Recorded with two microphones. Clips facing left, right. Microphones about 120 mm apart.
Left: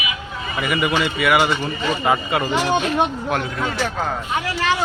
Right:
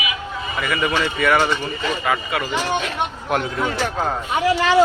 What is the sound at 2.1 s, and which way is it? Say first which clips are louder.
Speech: left 4 dB; 25° left (ahead or behind).